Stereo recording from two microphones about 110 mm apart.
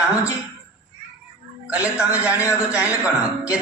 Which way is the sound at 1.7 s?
15° right (ahead or behind).